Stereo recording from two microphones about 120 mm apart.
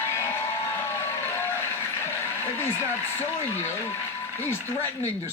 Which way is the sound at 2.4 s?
20° left (ahead or behind).